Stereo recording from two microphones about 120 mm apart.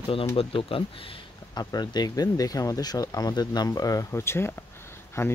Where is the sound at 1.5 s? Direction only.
35° left (ahead or behind).